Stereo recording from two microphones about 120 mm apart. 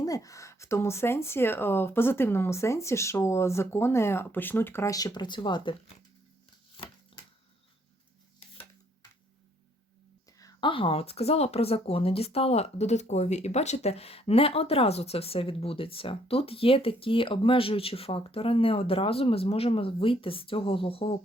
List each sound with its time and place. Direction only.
0.0 s speech: 30° left (ahead or behind)
6.8 s a sound: 45° left (ahead or behind)
10.6 s speech: 45° left (ahead or behind)